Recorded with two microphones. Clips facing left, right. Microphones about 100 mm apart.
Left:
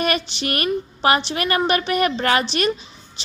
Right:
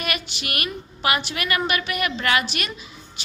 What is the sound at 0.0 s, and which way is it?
A woman's voice, 35° left (ahead or behind).